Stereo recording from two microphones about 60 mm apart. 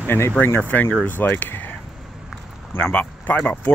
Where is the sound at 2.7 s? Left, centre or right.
Left.